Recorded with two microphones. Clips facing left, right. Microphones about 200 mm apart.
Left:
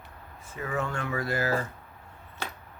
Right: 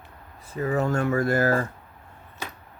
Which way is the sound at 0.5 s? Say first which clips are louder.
Right 8 dB; 35° right (ahead or behind).